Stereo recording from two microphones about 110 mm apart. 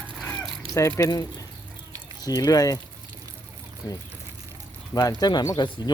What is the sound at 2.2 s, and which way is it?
Chicken, 35° left (ahead or behind).